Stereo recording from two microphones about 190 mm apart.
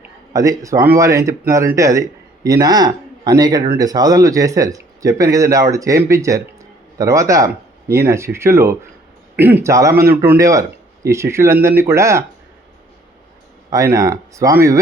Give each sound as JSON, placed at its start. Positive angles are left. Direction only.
{"t": 0.3, "sound": "speech", "side_deg": -20}
{"t": 13.7, "sound": "speech", "side_deg": -15}